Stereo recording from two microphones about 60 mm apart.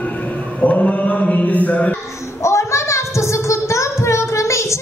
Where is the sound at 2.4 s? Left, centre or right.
Left.